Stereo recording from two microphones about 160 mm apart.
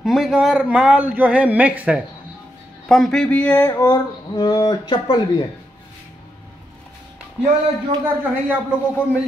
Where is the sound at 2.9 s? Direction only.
Centre (ahead or behind).